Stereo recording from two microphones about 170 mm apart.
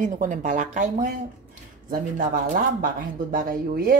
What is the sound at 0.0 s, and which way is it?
Speech, 50° right (ahead or behind).